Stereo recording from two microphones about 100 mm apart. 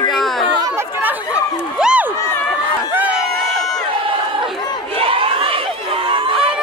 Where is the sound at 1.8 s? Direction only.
10° right (ahead or behind).